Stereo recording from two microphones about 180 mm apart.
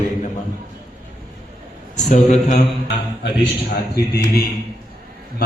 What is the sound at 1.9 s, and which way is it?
Speech, 40° left (ahead or behind).